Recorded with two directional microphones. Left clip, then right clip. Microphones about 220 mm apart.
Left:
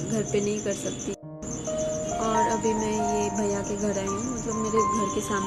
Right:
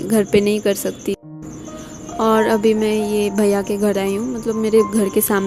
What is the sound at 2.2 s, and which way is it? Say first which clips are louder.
Speech: right 10 dB; 45° right (ahead or behind).